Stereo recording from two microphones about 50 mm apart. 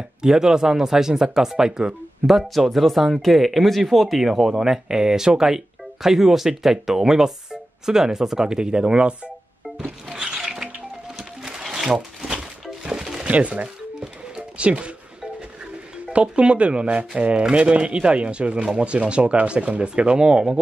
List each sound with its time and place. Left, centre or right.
0.2 s speech: centre
2.3 s speech: centre
10.1 s a sound: centre
12.8 s music: centre
13.3 s speech: right
14.3 s music: right
16.1 s speech: right